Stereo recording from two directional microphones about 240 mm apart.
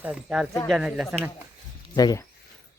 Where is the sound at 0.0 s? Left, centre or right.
Centre.